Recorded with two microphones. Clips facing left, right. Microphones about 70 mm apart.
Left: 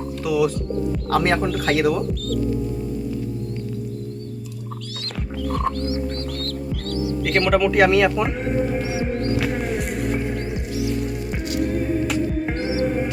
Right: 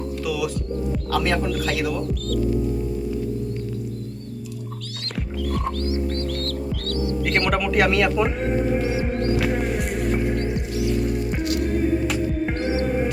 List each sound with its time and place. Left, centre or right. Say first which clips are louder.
0.3 s music: left 6 dB; left
1.1 s speech: left 3 dB; left
6.9 s music: left 1 dB; centre
7.2 s speech: left 5 dB; centre
12.0 s music: left 1 dB; centre